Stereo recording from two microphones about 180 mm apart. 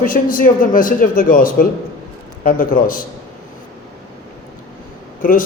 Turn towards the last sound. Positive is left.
turn(degrees=50)  # may be behind; listen again after turning